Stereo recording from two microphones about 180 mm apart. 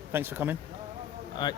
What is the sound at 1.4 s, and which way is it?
Speech, 25° left (ahead or behind).